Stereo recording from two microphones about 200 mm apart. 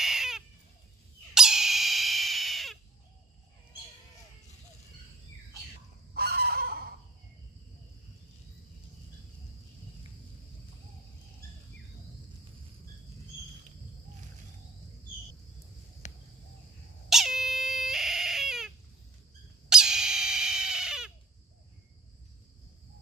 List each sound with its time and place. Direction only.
0.0 s bird: centre (ahead or behind)
1.3 s a sound: centre (ahead or behind)
6.1 s fowl: 50° right (ahead or behind)
16.0 s cricket: 35° left (ahead or behind)
17.1 s dog: centre (ahead or behind)
19.7 s dog: 5° right (ahead or behind)